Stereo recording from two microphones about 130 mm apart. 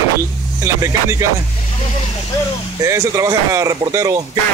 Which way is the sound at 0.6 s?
25° right (ahead or behind).